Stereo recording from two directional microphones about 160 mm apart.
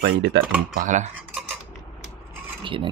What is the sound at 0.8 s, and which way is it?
Speech, 50° right (ahead or behind).